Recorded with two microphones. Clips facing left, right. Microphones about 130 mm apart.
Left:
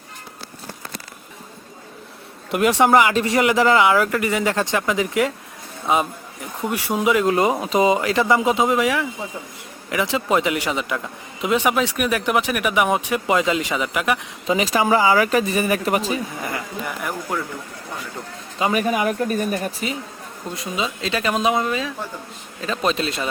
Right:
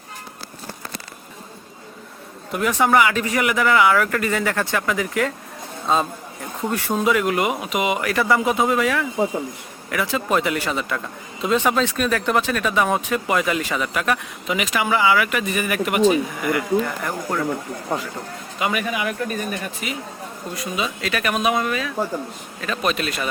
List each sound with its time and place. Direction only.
2.6 s a man's voice: 25° left (ahead or behind)
14.4 s speech: 35° left (ahead or behind)
16.8 s speech: 10° left (ahead or behind)
18.6 s speech: 35° left (ahead or behind)
20.6 s speech: 25° left (ahead or behind)